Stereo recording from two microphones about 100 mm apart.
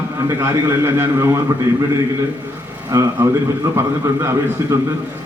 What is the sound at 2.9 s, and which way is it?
A man's voice, 30° right (ahead or behind).